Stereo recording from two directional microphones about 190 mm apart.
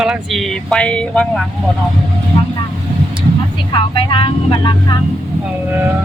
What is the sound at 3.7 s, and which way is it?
Speech, 25° left (ahead or behind).